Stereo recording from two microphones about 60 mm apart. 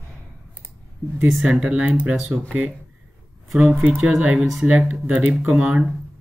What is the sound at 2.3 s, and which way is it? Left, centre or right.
Speech, right.